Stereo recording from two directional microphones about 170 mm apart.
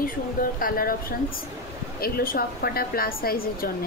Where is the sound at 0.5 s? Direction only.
55° left (ahead or behind).